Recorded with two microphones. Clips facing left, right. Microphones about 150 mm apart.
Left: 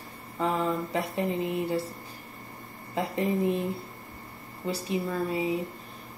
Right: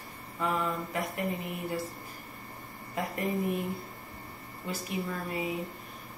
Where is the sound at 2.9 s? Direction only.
25° left (ahead or behind).